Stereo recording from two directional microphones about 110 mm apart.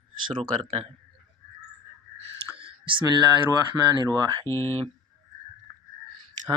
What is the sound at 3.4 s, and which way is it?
Speech, 35° right (ahead or behind).